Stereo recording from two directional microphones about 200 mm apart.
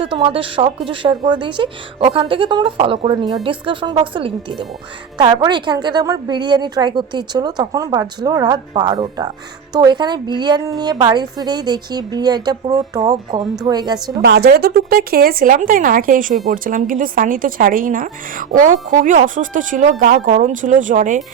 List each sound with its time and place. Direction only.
0.0 s a woman's voice: 25° right (ahead or behind)
14.2 s speech: 55° right (ahead or behind)